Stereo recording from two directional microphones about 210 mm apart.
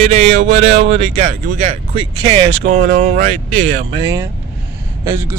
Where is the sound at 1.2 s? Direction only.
35° right (ahead or behind).